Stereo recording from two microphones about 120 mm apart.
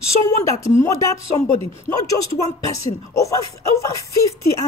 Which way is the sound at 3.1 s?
25° left (ahead or behind).